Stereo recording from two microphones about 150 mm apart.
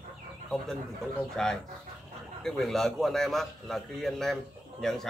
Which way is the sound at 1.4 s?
5° left (ahead or behind).